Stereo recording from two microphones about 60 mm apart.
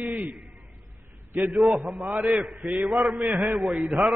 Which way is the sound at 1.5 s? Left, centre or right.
Centre.